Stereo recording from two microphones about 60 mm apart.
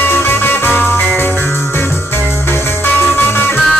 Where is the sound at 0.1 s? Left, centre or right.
Left.